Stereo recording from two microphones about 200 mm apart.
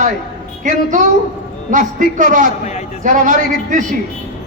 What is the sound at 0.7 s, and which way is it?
Speech, 40° right (ahead or behind).